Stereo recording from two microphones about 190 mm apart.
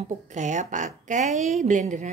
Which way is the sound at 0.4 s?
40° right (ahead or behind).